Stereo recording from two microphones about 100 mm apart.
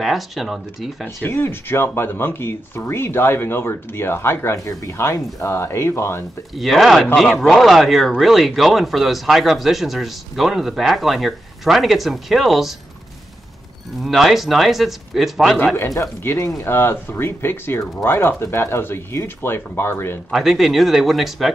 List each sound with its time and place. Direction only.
0.0 s speech: centre (ahead or behind)
1.0 s speech: 20° left (ahead or behind)
6.5 s speech: centre (ahead or behind)
14.0 s speech: centre (ahead or behind)
15.9 s speech: 30° left (ahead or behind)
20.2 s speech: centre (ahead or behind)